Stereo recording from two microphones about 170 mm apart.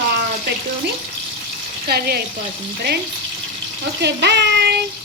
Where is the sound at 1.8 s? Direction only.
65° right (ahead or behind).